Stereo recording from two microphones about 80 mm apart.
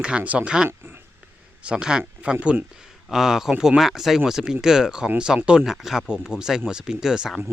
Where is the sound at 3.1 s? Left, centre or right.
Centre.